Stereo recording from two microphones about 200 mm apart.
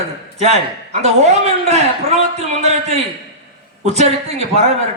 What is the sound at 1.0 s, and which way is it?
A man's voice, 35° right (ahead or behind).